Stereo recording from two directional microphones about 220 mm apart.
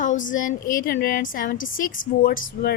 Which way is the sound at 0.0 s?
35° left (ahead or behind).